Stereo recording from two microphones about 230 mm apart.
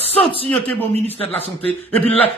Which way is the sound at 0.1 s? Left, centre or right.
Left.